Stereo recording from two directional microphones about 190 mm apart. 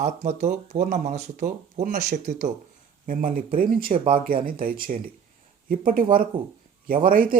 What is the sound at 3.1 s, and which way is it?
Speech, 45° right (ahead or behind).